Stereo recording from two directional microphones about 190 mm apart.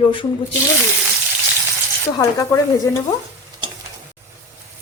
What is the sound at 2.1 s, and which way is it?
Speech, 15° left (ahead or behind).